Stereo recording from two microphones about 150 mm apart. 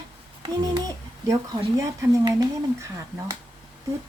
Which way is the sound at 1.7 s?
20° right (ahead or behind).